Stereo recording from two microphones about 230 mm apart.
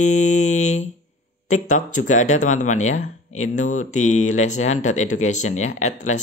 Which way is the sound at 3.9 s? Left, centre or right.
Left.